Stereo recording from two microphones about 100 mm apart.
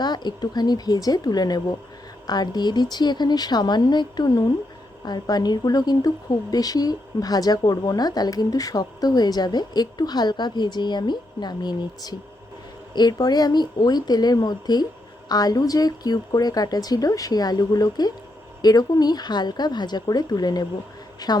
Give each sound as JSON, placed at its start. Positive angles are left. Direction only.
{"t": 0.0, "sound": "a woman's voice", "side_deg": 45}